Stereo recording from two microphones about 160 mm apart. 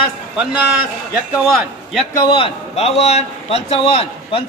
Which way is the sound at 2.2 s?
35° left (ahead or behind).